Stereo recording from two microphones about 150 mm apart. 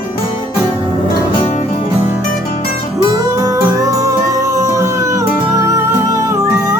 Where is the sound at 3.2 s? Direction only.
20° right (ahead or behind).